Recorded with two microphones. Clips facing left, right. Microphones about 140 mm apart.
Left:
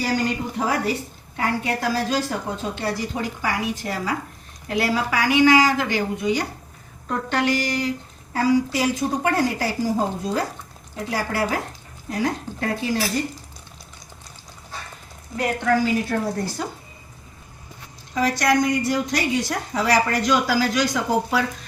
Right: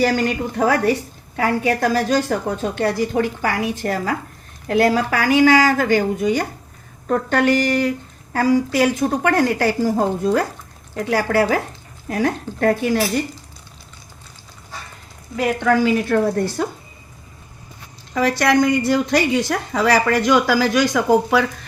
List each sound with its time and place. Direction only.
0.0 s a woman's voice: 75° right (ahead or behind); by 13.0 s 60° right (ahead or behind)
15.6 s speech: 65° right (ahead or behind)
18.1 s a woman's voice: 65° right (ahead or behind)